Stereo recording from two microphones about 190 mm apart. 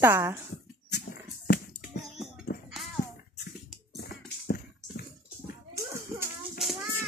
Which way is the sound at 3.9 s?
55° left (ahead or behind).